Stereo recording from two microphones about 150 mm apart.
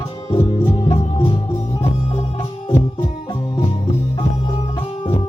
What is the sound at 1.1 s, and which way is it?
Music, 35° left (ahead or behind).